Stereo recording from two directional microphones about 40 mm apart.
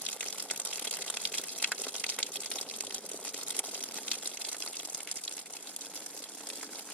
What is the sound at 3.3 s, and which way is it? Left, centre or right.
Crumpling, left.